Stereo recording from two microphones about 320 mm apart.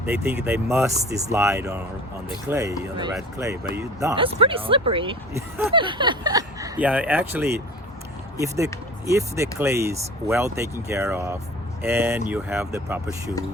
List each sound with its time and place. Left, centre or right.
0.0 s speech: centre